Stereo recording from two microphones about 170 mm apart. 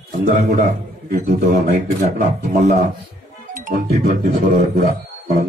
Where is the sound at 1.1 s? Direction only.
50° right (ahead or behind).